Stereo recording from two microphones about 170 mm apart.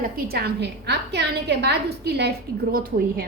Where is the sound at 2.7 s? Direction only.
60° right (ahead or behind).